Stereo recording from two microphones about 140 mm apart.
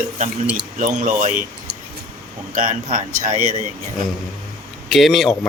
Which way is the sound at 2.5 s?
65° right (ahead or behind).